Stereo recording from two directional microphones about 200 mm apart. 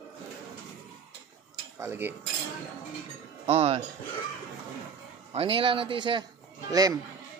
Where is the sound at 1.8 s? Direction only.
10° right (ahead or behind).